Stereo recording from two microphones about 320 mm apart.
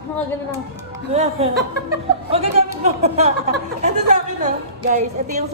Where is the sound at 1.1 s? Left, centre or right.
Centre.